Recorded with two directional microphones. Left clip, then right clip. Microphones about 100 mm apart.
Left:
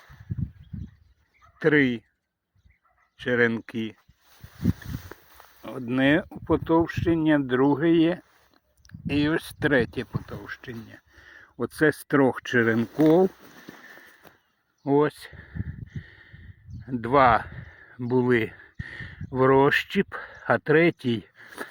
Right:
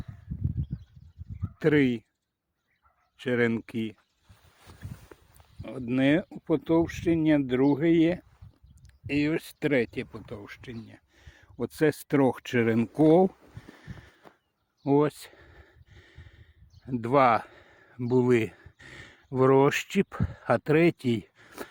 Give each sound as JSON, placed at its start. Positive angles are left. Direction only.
{"t": 1.5, "sound": "speech", "side_deg": -50}
{"t": 3.2, "sound": "speech", "side_deg": -45}
{"t": 5.6, "sound": "speech", "side_deg": -20}
{"t": 9.0, "sound": "speech", "side_deg": 0}
{"t": 10.2, "sound": "speech", "side_deg": -30}
{"t": 12.7, "sound": "speech", "side_deg": -60}
{"t": 13.1, "sound": "speech", "side_deg": -40}
{"t": 14.8, "sound": "a sound", "side_deg": -45}
{"t": 18.1, "sound": "speech", "side_deg": -40}